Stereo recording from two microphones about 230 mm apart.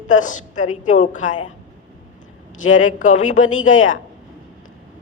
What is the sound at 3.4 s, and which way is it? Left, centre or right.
Speech, left.